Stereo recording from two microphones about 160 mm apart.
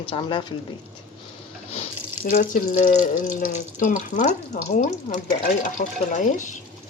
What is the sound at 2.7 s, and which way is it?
Frying, 45° left (ahead or behind).